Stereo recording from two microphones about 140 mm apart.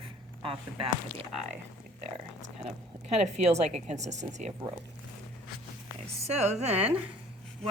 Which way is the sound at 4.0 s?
55° right (ahead or behind).